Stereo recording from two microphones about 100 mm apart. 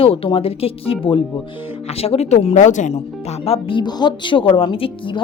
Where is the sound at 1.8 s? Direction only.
90° left.